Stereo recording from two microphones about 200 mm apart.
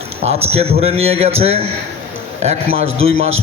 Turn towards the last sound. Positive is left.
turn(degrees=-30)  # may be behind; listen again after turning